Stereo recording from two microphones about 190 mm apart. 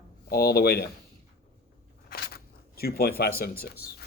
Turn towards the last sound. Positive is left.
turn(degrees=55)  # may be behind; listen again after turning